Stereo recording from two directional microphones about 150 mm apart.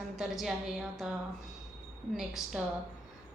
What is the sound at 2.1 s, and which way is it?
Speech, centre (ahead or behind).